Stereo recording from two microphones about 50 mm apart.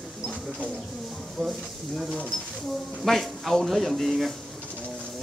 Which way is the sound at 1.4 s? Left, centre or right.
Centre.